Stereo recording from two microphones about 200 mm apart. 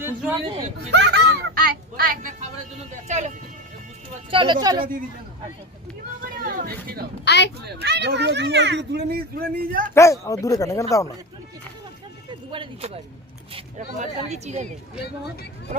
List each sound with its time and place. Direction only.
0.0 s speech: 10° right (ahead or behind)
0.9 s a sound: 60° right (ahead or behind)
2.9 s speech: 35° right (ahead or behind)
4.3 s speech: 25° right (ahead or behind)
6.2 s speech: 45° right (ahead or behind)
7.3 s speech: 60° left (ahead or behind)
7.8 s speech: 60° right (ahead or behind)
9.9 s speech: 15° left (ahead or behind)
12.3 s speech: 25° right (ahead or behind)